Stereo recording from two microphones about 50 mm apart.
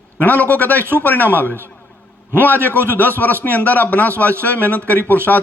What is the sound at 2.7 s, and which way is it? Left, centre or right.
Speech, right.